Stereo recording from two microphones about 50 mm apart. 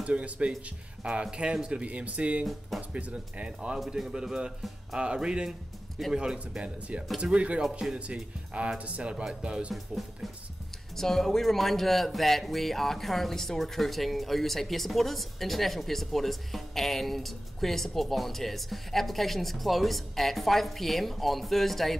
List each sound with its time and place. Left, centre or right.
0.0 s speech: right
9.1 s speech: centre
9.4 s speech: right
11.0 s speech: centre